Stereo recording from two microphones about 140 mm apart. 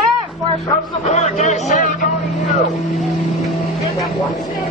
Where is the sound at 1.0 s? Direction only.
55° left (ahead or behind).